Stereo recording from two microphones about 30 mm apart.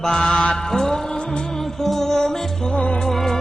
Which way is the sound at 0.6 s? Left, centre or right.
Centre.